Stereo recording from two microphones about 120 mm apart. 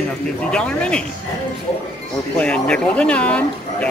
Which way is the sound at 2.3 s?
10° left (ahead or behind).